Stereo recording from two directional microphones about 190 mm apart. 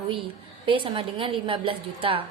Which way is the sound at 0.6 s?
25° right (ahead or behind).